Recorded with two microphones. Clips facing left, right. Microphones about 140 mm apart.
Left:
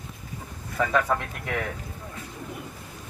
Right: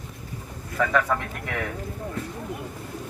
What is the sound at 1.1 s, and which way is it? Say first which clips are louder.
Speech: even; 15° left (ahead or behind).